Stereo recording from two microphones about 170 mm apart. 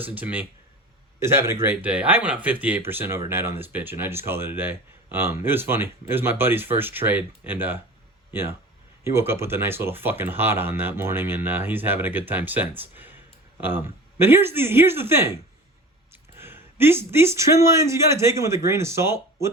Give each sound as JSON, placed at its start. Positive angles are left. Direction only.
{"t": 0.0, "sound": "speech", "side_deg": -10}